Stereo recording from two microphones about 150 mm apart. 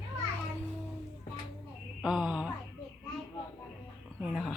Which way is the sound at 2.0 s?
5° right (ahead or behind).